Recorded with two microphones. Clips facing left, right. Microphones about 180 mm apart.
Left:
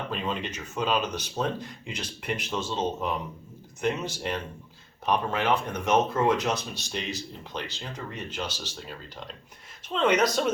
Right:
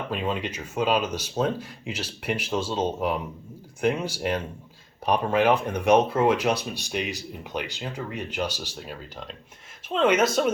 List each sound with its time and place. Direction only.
0.1 s speech: 10° right (ahead or behind)
9.9 s speech: 5° right (ahead or behind)